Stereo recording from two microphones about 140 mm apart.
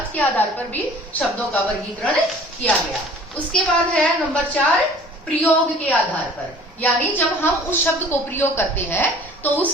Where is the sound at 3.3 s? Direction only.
5° left (ahead or behind).